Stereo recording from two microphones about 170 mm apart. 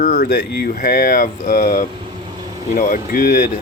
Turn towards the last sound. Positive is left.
turn(degrees=55)  # may be behind; listen again after turning